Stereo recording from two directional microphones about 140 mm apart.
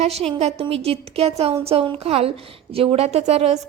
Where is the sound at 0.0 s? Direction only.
50° right (ahead or behind).